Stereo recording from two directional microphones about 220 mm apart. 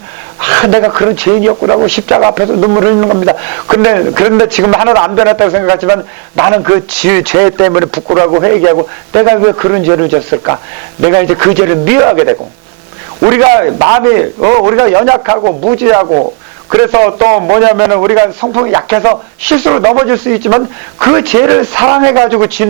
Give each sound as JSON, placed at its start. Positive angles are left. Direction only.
{"t": 0.4, "sound": "a man's voice", "side_deg": -15}
{"t": 4.6, "sound": "a man's voice", "side_deg": -25}
{"t": 13.2, "sound": "a man's voice", "side_deg": -20}
{"t": 16.6, "sound": "a man's voice", "side_deg": -20}